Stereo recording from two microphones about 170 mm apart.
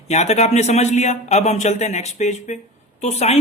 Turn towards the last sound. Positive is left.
turn(degrees=40)  # may be behind; listen again after turning